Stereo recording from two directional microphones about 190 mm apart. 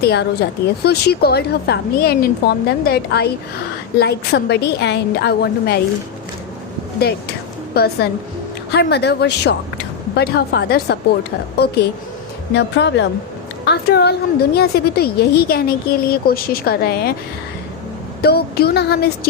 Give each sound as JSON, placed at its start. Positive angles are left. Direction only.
{"t": 0.0, "sound": "a woman's voice", "side_deg": 60}
{"t": 7.0, "sound": "music", "side_deg": 55}
{"t": 8.7, "sound": "a woman's voice", "side_deg": 60}
{"t": 18.2, "sound": "a woman's voice", "side_deg": 55}